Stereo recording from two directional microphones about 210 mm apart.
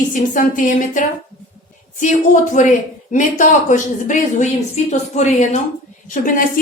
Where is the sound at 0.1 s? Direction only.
40° left (ahead or behind).